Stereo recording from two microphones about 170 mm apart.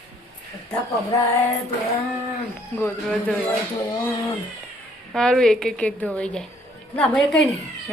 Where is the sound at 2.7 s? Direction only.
5° left (ahead or behind).